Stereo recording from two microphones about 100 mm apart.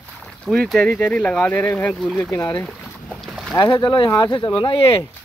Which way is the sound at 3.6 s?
50° left (ahead or behind).